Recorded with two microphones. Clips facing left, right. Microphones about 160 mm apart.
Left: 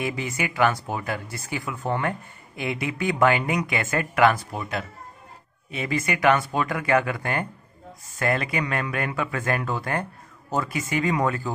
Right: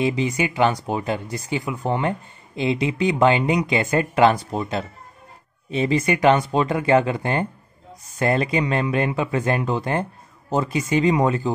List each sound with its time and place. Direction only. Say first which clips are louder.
0.0 s speech: right 6 dB; 20° right (ahead or behind)